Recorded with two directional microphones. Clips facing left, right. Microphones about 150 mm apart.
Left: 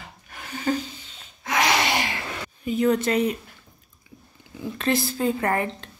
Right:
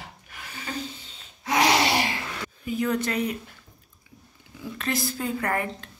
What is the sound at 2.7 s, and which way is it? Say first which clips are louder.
Speech: left 5 dB; 25° left (ahead or behind).